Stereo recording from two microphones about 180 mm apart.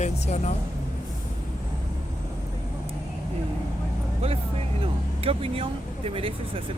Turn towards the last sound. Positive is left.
turn(degrees=-30)  # may be behind; listen again after turning